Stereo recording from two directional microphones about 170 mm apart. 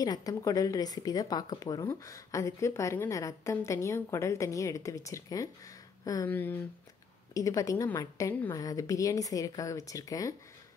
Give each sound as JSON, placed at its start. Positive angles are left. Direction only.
{"t": 0.0, "sound": "speech", "side_deg": 20}